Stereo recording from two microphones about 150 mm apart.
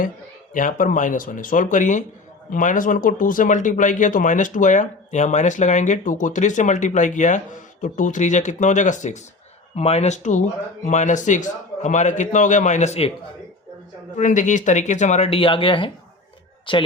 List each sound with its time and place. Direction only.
0.5 s a man's voice: 65° left (ahead or behind); by 13.1 s 45° left (ahead or behind)
14.2 s a man's voice: 55° left (ahead or behind); by 16.8 s 35° left (ahead or behind)